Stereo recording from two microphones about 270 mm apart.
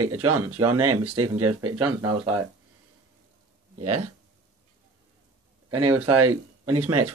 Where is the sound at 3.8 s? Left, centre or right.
Right.